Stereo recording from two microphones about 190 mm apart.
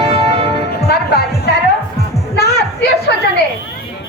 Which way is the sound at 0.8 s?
55° left (ahead or behind).